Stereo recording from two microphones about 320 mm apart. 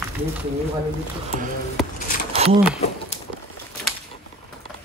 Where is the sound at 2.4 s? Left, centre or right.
Centre.